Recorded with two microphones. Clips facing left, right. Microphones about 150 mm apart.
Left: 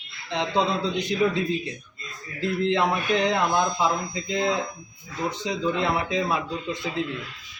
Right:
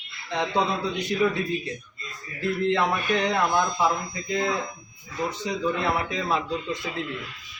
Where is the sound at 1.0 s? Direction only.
15° left (ahead or behind).